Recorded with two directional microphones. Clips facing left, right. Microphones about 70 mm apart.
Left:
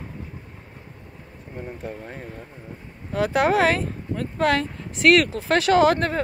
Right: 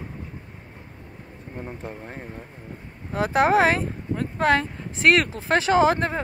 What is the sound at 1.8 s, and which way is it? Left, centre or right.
Speech, right.